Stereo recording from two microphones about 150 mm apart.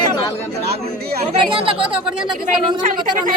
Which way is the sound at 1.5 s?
35° right (ahead or behind).